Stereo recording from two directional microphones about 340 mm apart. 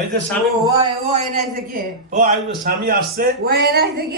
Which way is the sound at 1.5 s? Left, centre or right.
Right.